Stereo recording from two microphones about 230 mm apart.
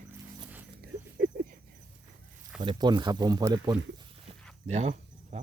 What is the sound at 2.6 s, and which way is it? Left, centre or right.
Speech, centre.